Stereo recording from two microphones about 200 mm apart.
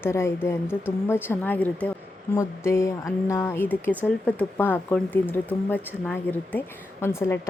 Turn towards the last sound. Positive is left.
turn(degrees=10)  # may be behind; listen again after turning